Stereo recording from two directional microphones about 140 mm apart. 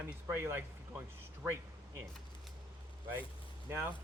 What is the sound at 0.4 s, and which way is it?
Speech, 15° right (ahead or behind).